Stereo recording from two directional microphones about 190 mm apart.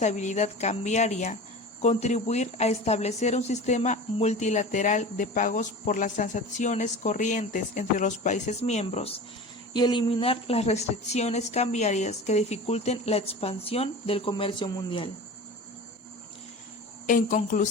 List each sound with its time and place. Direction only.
0.0 s speech: 40° left (ahead or behind)
9.7 s speech: 25° left (ahead or behind)
17.1 s speech: 45° left (ahead or behind)